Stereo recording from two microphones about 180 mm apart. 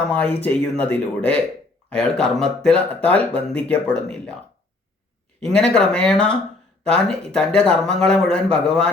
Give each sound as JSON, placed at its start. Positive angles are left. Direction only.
{"t": 0.1, "sound": "speech", "side_deg": 5}
{"t": 5.5, "sound": "speech", "side_deg": 5}